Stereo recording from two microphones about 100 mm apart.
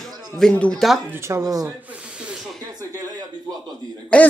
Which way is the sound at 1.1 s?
25° right (ahead or behind).